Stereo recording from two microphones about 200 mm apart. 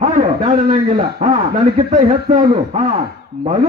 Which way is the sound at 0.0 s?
35° right (ahead or behind).